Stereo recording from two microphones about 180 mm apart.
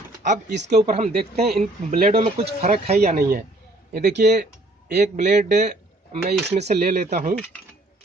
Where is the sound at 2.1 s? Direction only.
40° right (ahead or behind).